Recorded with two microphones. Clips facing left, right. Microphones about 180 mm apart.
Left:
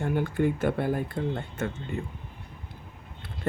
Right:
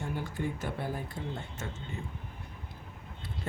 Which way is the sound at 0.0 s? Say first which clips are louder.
Left 9 dB; 60° left (ahead or behind).